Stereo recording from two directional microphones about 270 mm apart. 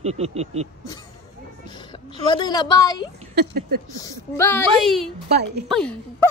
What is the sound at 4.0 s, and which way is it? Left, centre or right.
A woman's voice, centre.